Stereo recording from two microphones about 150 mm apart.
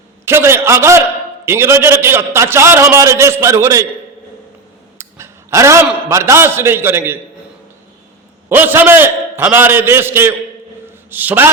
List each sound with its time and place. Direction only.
0.3 s a man's voice: 15° right (ahead or behind)
4.9 s a sound: 20° right (ahead or behind)
6.1 s a man's voice: 20° right (ahead or behind)
8.4 s a man's voice: 15° right (ahead or behind)